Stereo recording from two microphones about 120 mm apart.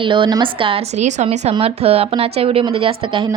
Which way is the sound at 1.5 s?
55° right (ahead or behind).